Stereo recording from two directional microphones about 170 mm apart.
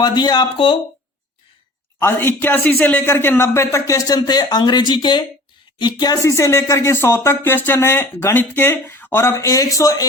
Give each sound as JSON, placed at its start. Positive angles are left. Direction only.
{"t": 0.0, "sound": "speech", "side_deg": 25}
{"t": 2.0, "sound": "speech", "side_deg": 15}